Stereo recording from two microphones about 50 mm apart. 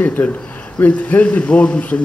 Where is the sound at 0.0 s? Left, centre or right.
Left.